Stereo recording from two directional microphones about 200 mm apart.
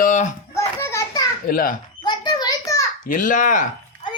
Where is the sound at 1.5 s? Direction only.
45° left (ahead or behind).